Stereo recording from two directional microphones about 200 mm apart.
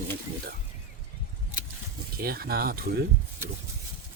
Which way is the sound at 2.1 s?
50° right (ahead or behind).